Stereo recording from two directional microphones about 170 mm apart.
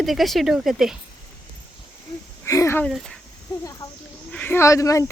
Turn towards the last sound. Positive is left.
turn(degrees=20)  # may be behind; listen again after turning